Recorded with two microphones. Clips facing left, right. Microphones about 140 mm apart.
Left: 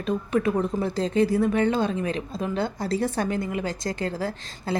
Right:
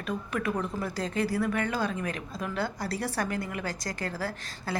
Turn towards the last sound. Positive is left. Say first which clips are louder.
# left 5 dB
turn(degrees=25)  # may be behind; listen again after turning